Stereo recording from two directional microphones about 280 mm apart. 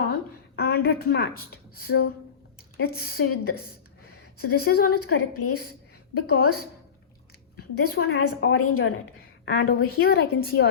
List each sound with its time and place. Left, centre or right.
0.1 s a sound: left
1.8 s a woman's voice: left
7.9 s a woman's voice: left
9.5 s a woman's voice: left